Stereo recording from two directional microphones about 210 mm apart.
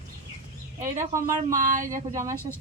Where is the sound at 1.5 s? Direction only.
40° right (ahead or behind).